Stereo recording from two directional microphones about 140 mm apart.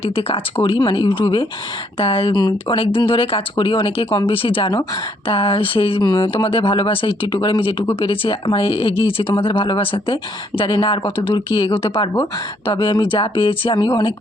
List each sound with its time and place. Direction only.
0.0 s speech: 45° left (ahead or behind)